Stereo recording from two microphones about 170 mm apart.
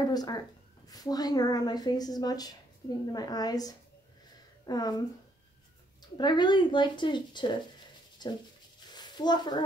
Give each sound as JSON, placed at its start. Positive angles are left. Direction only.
{"t": 0.1, "sound": "a woman's voice", "side_deg": 25}
{"t": 6.1, "sound": "a woman's voice", "side_deg": 25}
{"t": 8.9, "sound": "a sound", "side_deg": 25}